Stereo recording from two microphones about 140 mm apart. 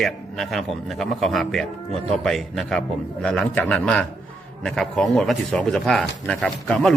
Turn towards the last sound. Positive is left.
turn(degrees=5)  # may be behind; listen again after turning